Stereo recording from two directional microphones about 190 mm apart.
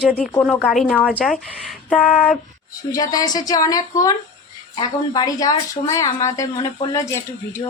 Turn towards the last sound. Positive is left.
turn(degrees=15)  # may be behind; listen again after turning